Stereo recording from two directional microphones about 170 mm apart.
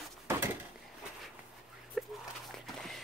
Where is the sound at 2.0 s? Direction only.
Centre (ahead or behind).